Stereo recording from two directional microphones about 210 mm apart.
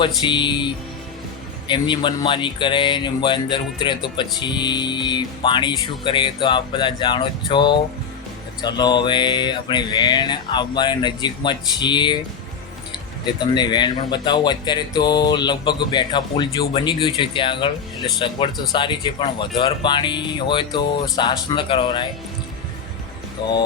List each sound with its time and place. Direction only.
0.2 s speech: 20° left (ahead or behind)
13.5 s speech: 20° left (ahead or behind)
23.4 s speech: 20° left (ahead or behind)